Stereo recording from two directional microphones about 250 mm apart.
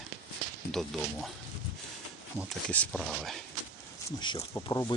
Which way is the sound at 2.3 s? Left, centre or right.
Centre.